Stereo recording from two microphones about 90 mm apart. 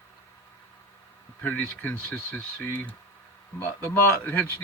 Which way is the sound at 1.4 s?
15° left (ahead or behind).